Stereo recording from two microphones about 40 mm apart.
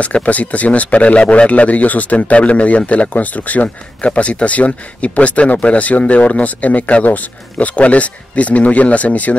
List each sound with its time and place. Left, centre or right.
0.0 s speech: left